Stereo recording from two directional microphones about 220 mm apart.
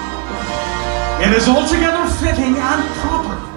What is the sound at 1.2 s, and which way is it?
Speech, 15° right (ahead or behind).